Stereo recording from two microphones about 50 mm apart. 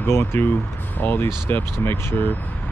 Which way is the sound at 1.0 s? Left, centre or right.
Left.